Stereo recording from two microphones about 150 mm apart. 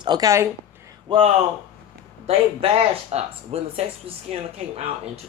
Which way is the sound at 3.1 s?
45° right (ahead or behind).